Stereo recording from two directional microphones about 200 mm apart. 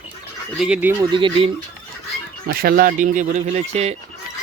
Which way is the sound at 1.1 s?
25° right (ahead or behind).